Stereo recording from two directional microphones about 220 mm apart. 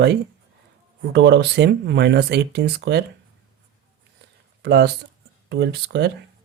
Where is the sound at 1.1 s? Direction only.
50° right (ahead or behind).